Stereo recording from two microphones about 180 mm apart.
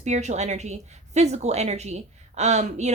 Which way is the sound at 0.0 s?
40° right (ahead or behind).